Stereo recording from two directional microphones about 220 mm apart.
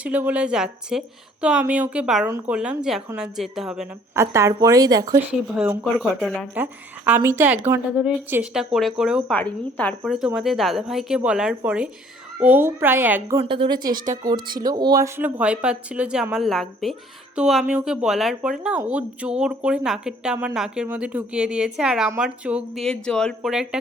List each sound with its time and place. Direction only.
0.0 s a woman's voice: 5° right (ahead or behind)
9.3 s a woman's voice: 5° left (ahead or behind)
10.1 s a woman's voice: 5° right (ahead or behind)
13.4 s a woman's voice: 25° right (ahead or behind); by 23.6 s centre (ahead or behind)